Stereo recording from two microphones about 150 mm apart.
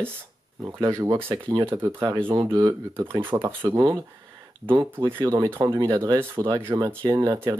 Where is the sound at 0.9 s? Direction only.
20° right (ahead or behind).